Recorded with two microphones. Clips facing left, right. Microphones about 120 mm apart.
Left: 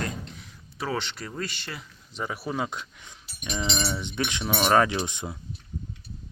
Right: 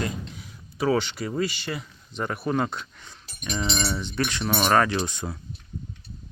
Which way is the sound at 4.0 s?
20° left (ahead or behind).